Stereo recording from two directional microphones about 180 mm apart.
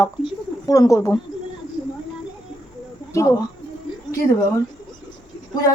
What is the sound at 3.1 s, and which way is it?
Speech, 15° left (ahead or behind).